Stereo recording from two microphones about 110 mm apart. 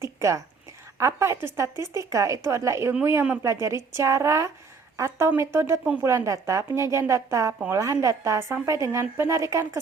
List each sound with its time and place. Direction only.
0.2 s a woman's voice: 30° right (ahead or behind)